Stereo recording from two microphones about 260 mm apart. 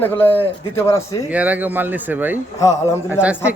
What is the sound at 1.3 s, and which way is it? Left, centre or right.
Speech, centre.